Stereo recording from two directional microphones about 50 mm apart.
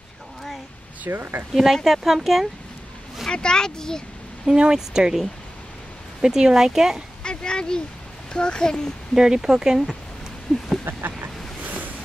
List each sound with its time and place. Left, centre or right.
1.0 s speech: right
1.9 s speech: centre
3.3 s speech: centre
4.5 s speech: centre
6.2 s speech: centre
7.2 s speech: centre
9.1 s speech: centre
10.5 s a sound: centre
10.9 s a sound: right